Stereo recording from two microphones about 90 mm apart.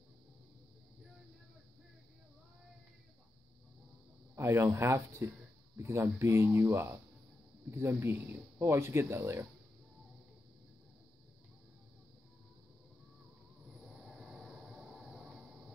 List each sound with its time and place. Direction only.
4.4 s speech: 30° right (ahead or behind)
14.0 s train: 5° right (ahead or behind)